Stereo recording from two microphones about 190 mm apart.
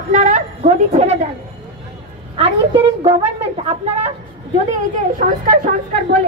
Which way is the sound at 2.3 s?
30° right (ahead or behind).